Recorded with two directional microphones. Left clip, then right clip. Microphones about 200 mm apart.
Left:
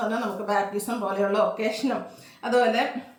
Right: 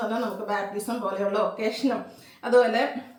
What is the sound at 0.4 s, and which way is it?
A woman's voice, 20° left (ahead or behind).